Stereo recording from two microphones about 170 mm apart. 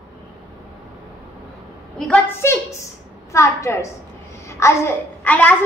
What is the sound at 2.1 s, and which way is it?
A woman's voice, 15° left (ahead or behind).